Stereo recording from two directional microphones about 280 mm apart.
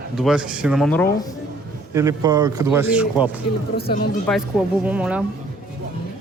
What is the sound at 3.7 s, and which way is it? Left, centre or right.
Speech, left.